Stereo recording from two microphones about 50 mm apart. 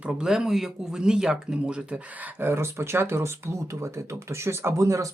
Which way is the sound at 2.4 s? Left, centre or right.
Right.